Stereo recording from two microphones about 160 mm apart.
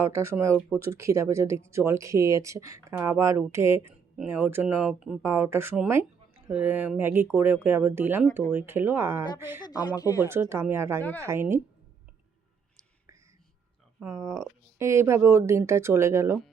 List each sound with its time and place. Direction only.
0.0 s speech: 15° right (ahead or behind)
9.6 s speech: 25° left (ahead or behind)
10.2 s speech: 15° right (ahead or behind)
11.0 s speech: 10° left (ahead or behind)
11.3 s speech: 15° right (ahead or behind)
14.0 s speech: 15° right (ahead or behind)